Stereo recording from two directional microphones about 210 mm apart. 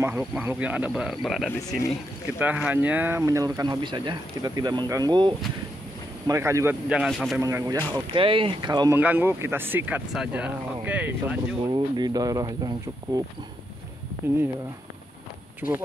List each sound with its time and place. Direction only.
0.0 s speech: 5° right (ahead or behind)
7.4 s speech: 15° right (ahead or behind)
11.6 s speech: 20° right (ahead or behind)